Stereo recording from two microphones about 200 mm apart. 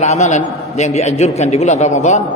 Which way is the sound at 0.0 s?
35° left (ahead or behind).